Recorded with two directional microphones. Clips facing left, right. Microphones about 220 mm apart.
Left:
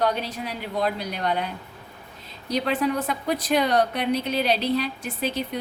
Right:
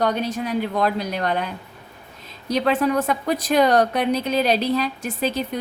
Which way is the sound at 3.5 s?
45° right (ahead or behind).